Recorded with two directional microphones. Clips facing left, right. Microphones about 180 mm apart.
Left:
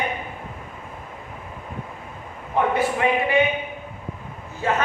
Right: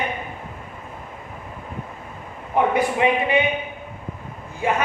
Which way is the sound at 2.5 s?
15° right (ahead or behind).